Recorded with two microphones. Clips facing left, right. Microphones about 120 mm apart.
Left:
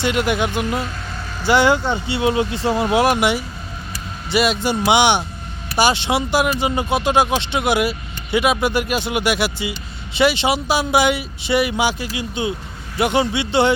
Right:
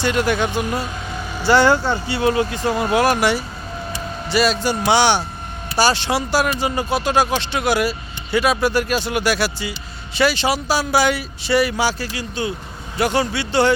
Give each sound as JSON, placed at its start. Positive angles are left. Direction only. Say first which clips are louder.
{"t": 0.0, "sound": "speech", "louder": "even", "side_deg": 15}